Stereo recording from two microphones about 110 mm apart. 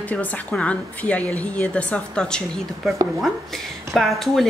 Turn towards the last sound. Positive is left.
turn(degrees=0)  # may be behind; listen again after turning